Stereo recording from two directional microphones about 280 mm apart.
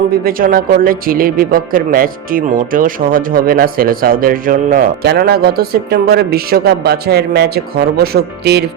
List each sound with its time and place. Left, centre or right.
0.1 s speech: right